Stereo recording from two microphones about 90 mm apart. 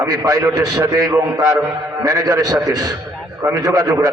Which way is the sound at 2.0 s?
45° right (ahead or behind).